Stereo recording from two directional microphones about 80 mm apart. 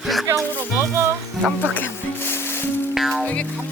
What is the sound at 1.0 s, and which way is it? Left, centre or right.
Speech, right.